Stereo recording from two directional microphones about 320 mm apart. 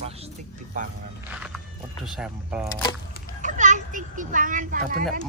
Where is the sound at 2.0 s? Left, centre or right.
Centre.